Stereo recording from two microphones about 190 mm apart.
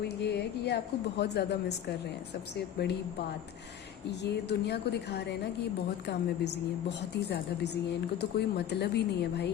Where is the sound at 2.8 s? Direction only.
60° left (ahead or behind).